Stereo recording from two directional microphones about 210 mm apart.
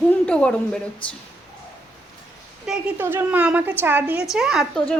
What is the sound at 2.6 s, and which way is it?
A woman's voice, 5° right (ahead or behind).